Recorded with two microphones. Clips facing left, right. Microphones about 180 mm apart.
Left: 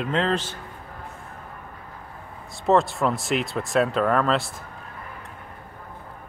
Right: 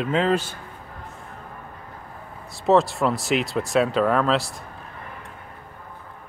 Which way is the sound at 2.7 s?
Centre (ahead or behind).